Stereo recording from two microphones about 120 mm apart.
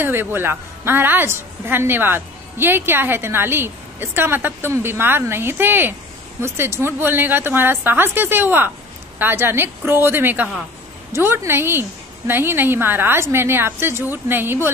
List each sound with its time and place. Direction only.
0.0 s a woman's voice: 20° right (ahead or behind)